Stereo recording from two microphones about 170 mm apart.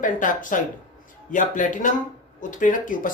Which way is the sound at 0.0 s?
50° left (ahead or behind).